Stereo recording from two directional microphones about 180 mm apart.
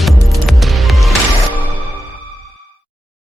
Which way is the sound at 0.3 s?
Centre (ahead or behind).